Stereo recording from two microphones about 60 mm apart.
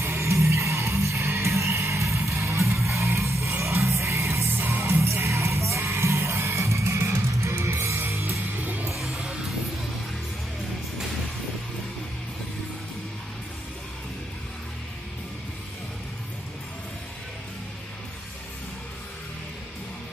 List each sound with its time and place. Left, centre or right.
0.0 s music: right
8.5 s music: right
8.9 s music: centre